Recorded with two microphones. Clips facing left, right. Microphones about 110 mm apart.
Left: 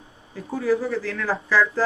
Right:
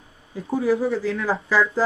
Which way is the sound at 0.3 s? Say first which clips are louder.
Right 1 dB; 15° right (ahead or behind).